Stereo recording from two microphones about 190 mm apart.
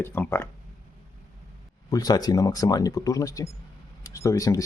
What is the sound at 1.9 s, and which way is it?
Speech, 20° left (ahead or behind).